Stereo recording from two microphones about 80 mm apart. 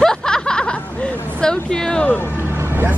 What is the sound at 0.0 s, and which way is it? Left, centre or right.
Chuckle, centre.